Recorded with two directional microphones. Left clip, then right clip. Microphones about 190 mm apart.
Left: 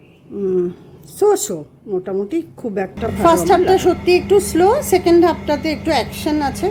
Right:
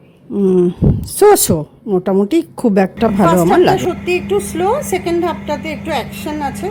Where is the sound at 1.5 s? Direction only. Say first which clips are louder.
Right 7 dB; 40° right (ahead or behind).